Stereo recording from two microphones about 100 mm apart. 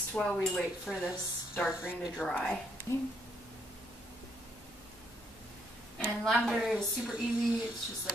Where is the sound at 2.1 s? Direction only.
10° left (ahead or behind).